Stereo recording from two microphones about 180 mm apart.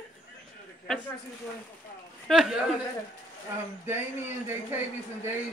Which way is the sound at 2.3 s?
Centre (ahead or behind).